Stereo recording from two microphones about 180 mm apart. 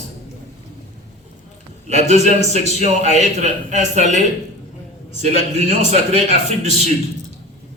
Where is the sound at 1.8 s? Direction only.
40° right (ahead or behind).